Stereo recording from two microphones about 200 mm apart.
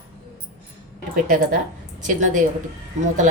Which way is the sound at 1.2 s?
45° right (ahead or behind).